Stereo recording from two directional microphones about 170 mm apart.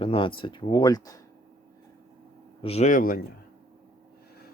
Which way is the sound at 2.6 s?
40° left (ahead or behind).